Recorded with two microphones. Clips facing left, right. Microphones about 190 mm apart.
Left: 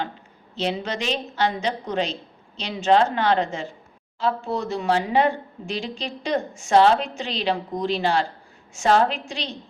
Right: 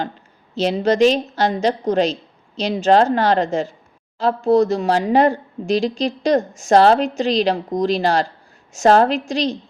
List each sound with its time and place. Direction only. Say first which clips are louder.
0.5 s speech: right 9 dB; 40° right (ahead or behind)